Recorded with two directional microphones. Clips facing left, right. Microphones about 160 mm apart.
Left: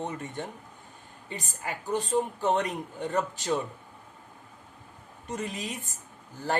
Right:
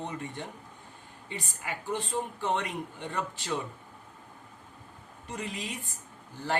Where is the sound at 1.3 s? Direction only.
40° left (ahead or behind).